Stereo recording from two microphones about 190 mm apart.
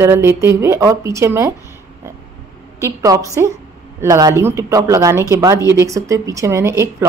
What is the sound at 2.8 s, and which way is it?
Speech, 15° right (ahead or behind).